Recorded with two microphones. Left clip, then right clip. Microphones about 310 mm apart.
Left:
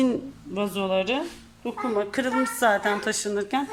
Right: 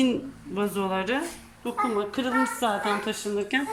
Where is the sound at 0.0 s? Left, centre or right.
Centre.